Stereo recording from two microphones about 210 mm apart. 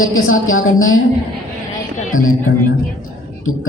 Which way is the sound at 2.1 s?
75° left (ahead or behind).